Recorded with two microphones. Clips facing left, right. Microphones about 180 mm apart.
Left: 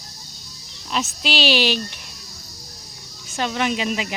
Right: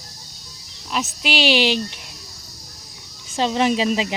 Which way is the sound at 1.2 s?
15° right (ahead or behind).